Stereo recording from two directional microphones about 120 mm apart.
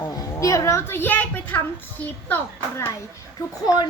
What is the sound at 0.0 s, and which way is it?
A woman's voice, 30° left (ahead or behind).